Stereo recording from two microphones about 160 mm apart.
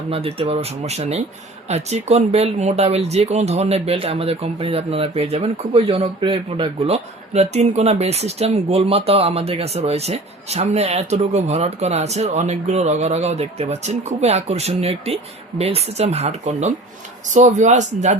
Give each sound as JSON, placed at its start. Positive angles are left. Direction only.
{"t": 0.1, "sound": "speech", "side_deg": -35}